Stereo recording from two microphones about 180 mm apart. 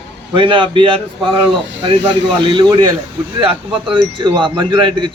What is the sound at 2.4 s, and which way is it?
Speech, 25° right (ahead or behind).